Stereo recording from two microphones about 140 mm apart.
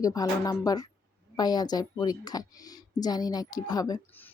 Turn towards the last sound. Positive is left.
turn(degrees=30)  # may be behind; listen again after turning